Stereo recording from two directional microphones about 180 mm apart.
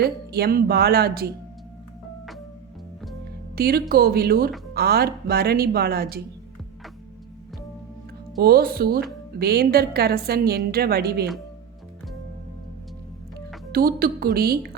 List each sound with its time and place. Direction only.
0.0 s a woman's voice: 60° right (ahead or behind)
3.5 s a woman's voice: 60° right (ahead or behind)
8.4 s a woman's voice: 55° right (ahead or behind)
13.7 s a woman's voice: 55° right (ahead or behind)